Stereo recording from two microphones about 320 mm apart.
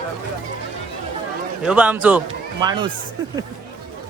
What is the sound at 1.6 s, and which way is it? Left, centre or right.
A man's voice, centre.